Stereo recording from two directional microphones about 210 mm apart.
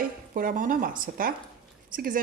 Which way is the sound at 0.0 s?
40° right (ahead or behind).